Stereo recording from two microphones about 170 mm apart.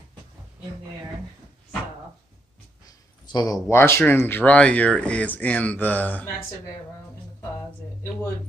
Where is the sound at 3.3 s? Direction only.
25° left (ahead or behind).